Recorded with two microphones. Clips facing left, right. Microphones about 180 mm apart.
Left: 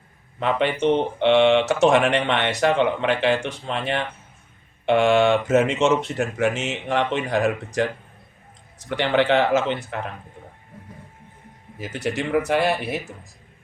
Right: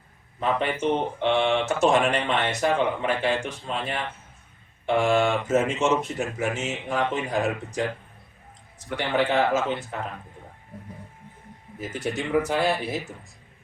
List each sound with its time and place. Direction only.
0.3 s a man's voice: 80° left
9.0 s speech: 80° left
11.9 s speech: 75° left (ahead or behind)